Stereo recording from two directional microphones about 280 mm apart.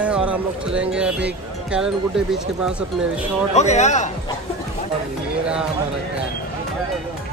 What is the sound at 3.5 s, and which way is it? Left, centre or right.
Speech, left.